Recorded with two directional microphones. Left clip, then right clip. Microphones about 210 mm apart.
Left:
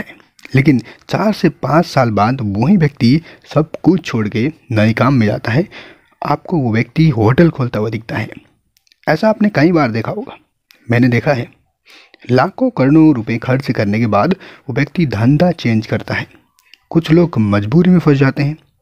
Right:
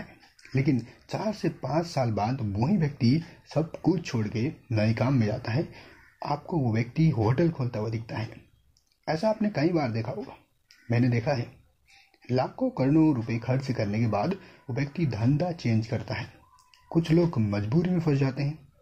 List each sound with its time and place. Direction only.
0.4 s speech: 50° left (ahead or behind)